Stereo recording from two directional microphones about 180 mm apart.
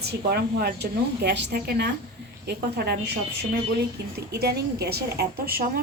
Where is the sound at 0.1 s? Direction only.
60° right (ahead or behind).